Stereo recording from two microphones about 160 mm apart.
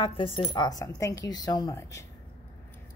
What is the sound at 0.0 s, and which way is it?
A woman's voice, 35° left (ahead or behind).